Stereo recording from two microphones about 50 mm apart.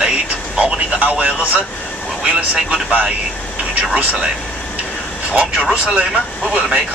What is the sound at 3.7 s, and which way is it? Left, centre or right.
Speech, right.